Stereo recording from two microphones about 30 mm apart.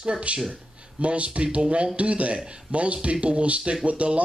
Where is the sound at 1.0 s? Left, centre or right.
Right.